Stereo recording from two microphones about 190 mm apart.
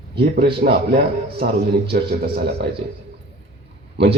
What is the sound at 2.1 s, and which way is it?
Speech, 60° right (ahead or behind).